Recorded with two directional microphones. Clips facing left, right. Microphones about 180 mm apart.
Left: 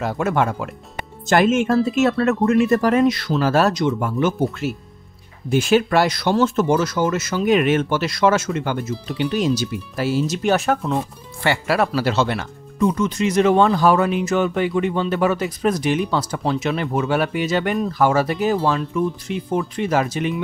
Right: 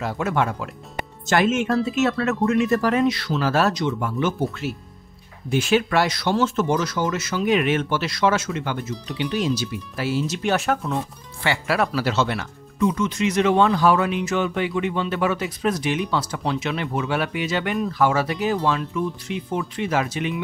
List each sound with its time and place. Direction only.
0.0 s speech: 50° left (ahead or behind)